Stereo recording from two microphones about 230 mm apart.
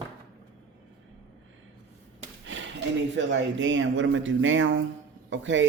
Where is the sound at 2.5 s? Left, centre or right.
Right.